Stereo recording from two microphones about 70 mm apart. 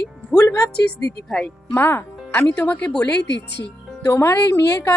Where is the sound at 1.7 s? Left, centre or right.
Left.